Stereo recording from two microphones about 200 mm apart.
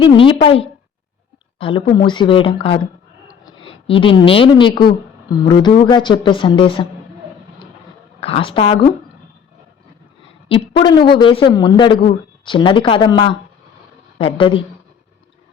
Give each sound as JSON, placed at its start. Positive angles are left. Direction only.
{"t": 0.0, "sound": "a woman's voice", "side_deg": 25}
{"t": 8.2, "sound": "speech", "side_deg": 25}
{"t": 10.5, "sound": "speech", "side_deg": 25}